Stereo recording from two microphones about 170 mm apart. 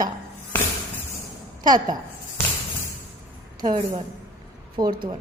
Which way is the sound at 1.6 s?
25° right (ahead or behind).